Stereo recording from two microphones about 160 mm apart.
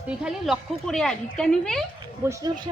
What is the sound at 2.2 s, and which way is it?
Speech, 20° right (ahead or behind).